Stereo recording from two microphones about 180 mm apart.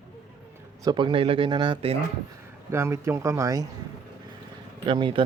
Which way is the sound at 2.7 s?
15° right (ahead or behind).